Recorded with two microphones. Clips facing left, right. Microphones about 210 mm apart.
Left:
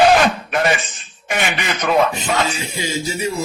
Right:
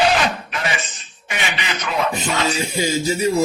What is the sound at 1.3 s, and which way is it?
Speech, 50° left (ahead or behind).